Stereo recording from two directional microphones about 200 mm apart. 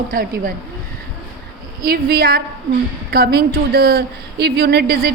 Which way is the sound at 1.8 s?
50° right (ahead or behind).